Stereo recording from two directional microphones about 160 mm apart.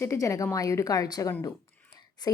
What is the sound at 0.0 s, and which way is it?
Speech, 20° left (ahead or behind).